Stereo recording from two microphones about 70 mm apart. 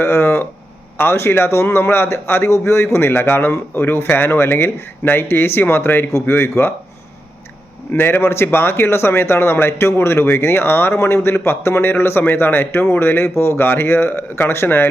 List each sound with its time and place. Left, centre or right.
0.0 s a sound: left
0.9 s speech: left
7.9 s speech: left